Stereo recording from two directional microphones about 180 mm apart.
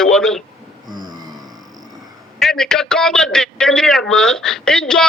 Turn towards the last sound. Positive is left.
turn(degrees=5)  # may be behind; listen again after turning